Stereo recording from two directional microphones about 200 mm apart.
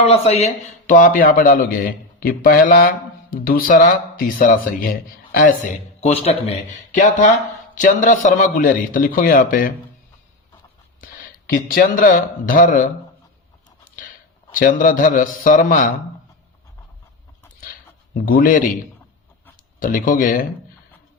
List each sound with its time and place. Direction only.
0.0 s a man's voice: 30° left (ahead or behind)
7.8 s a man's voice: 40° left (ahead or behind)
11.7 s a man's voice: 45° left (ahead or behind)
14.5 s a man's voice: 40° left (ahead or behind)
18.3 s a man's voice: 45° left (ahead or behind)
19.8 s a man's voice: 40° left (ahead or behind)